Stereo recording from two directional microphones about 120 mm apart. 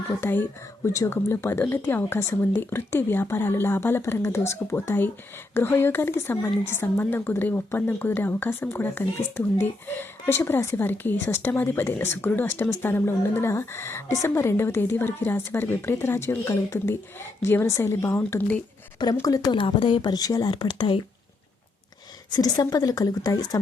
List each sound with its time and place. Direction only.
0.2 s a woman's voice: 15° left (ahead or behind)
19.5 s speech: 45° left (ahead or behind)
22.4 s speech: 30° left (ahead or behind)